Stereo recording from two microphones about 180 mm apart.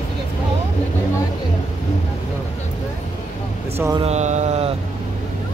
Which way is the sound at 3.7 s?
15° right (ahead or behind).